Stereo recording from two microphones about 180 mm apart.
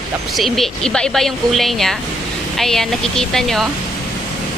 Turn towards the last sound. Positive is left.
turn(degrees=0)  # may be behind; listen again after turning